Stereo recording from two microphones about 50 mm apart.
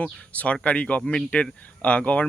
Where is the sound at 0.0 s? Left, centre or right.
Left.